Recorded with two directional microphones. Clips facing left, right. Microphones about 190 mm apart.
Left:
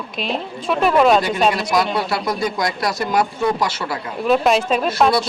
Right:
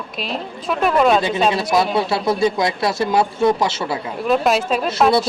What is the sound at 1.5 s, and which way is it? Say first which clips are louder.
Speech: right 1 dB; 25° right (ahead or behind).